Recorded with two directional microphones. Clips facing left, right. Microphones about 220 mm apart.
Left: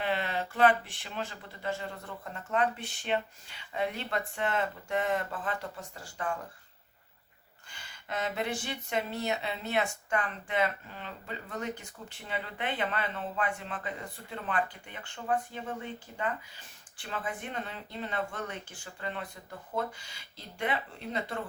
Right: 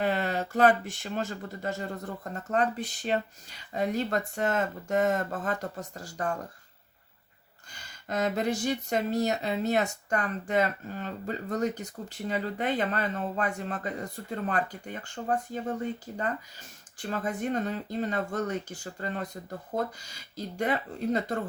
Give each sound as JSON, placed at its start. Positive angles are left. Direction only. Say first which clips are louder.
{"t": 0.0, "sound": "speech", "louder": "right 4 dB", "side_deg": -45}
{"t": 7.7, "sound": "speech", "louder": "right 4 dB", "side_deg": -40}